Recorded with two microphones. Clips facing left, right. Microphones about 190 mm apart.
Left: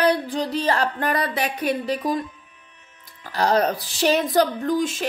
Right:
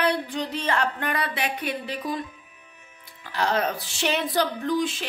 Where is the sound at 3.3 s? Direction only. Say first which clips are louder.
Left 5 dB; 40° left (ahead or behind).